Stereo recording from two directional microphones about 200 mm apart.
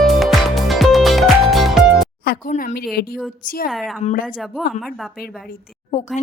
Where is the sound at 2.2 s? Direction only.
50° left (ahead or behind).